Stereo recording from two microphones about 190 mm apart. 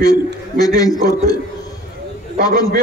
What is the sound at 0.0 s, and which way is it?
A man's voice, 20° left (ahead or behind).